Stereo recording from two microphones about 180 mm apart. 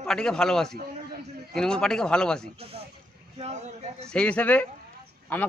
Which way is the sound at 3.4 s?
40° right (ahead or behind).